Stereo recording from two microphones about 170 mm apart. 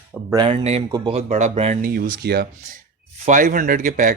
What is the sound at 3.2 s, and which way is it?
Speech, 50° right (ahead or behind).